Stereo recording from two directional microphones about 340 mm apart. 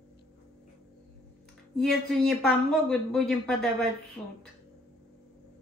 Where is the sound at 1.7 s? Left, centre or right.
Centre.